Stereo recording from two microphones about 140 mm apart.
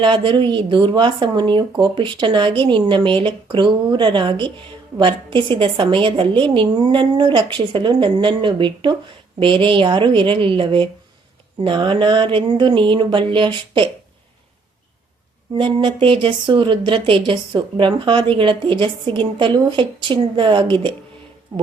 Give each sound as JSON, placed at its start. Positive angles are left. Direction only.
{"t": 0.0, "sound": "a woman's voice", "side_deg": -35}
{"t": 15.5, "sound": "a woman's voice", "side_deg": -35}